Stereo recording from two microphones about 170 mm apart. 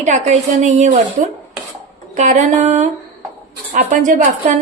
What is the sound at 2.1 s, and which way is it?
A woman's voice, 45° right (ahead or behind).